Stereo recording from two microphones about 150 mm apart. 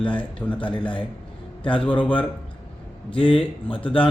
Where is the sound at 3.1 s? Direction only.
35° left (ahead or behind).